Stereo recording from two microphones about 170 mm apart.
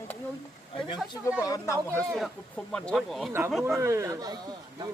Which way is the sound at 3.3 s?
15° right (ahead or behind).